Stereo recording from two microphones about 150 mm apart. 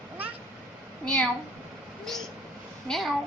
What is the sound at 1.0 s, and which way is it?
Speech, 5° left (ahead or behind).